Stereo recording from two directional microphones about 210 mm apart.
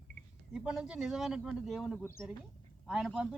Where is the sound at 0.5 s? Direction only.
Centre (ahead or behind).